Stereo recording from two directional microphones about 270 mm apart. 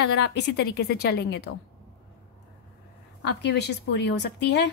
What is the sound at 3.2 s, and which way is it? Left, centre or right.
Speech, left.